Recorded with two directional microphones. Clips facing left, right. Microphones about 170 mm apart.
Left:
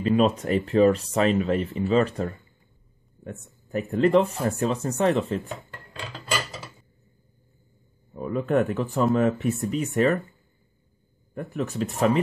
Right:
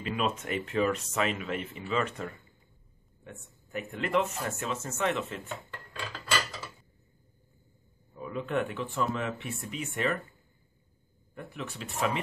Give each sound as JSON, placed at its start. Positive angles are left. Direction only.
{"t": 0.0, "sound": "speech", "side_deg": 35}
{"t": 8.1, "sound": "speech", "side_deg": 45}
{"t": 11.3, "sound": "speech", "side_deg": 40}